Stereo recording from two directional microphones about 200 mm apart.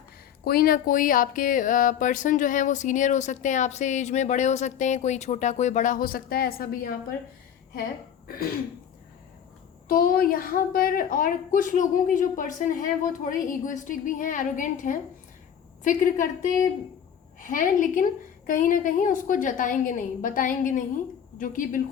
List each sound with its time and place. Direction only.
0.4 s speech: 50° left (ahead or behind)
9.9 s speech: 45° left (ahead or behind)